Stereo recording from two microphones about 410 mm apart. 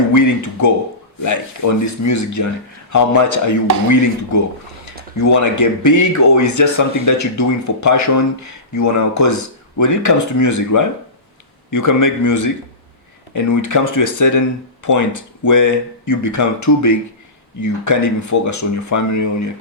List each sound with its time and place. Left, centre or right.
0.1 s speech: left
5.1 s speech: left